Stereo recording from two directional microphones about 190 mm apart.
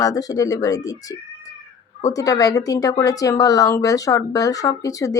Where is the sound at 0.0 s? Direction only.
20° left (ahead or behind).